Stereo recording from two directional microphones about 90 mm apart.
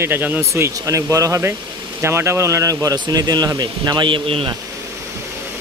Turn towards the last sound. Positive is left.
turn(degrees=-80)